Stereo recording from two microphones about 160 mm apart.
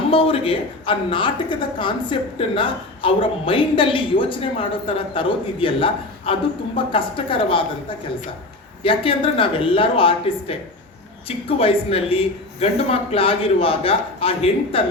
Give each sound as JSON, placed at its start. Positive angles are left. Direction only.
{"t": 0.1, "sound": "a woman's voice", "side_deg": 35}
{"t": 8.8, "sound": "a woman's voice", "side_deg": 35}